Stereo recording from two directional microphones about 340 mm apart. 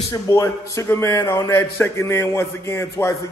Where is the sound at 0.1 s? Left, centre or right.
Centre.